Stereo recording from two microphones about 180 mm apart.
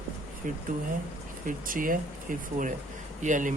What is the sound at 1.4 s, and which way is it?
Speech, 50° right (ahead or behind).